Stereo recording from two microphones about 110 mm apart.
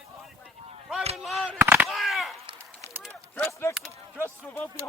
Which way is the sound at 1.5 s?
15° right (ahead or behind).